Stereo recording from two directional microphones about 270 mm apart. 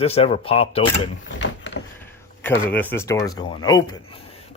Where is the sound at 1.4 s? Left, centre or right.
Left.